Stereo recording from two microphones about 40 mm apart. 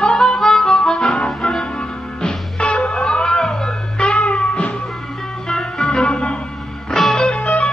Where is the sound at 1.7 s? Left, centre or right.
Centre.